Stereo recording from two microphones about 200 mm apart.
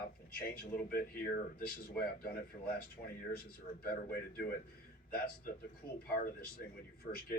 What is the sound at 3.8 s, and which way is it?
Speech, 50° left (ahead or behind).